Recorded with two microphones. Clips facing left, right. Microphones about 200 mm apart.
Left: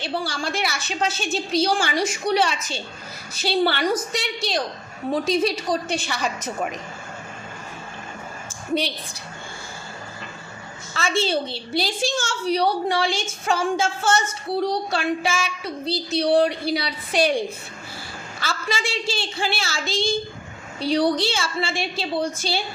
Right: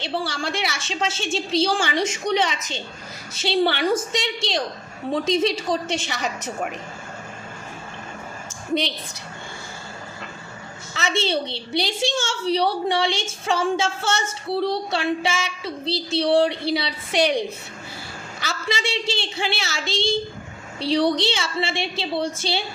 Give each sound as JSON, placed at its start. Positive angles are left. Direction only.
{"t": 0.0, "sound": "a woman's voice", "side_deg": -25}
{"t": 10.9, "sound": "a woman's voice", "side_deg": -20}